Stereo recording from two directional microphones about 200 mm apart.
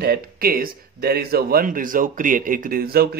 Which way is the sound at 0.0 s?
50° right (ahead or behind).